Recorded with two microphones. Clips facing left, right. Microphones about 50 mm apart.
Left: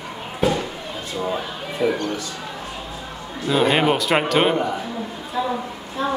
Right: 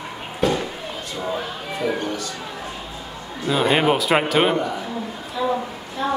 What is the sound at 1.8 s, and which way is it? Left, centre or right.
Speech, left.